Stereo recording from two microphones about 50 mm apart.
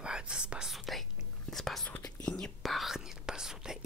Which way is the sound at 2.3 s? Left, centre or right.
Centre.